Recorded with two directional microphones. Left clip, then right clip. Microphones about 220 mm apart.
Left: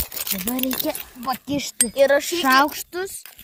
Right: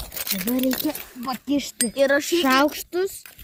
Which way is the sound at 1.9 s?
30° left (ahead or behind).